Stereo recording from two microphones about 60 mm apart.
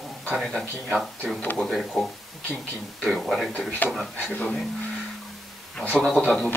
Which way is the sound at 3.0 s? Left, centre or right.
Centre.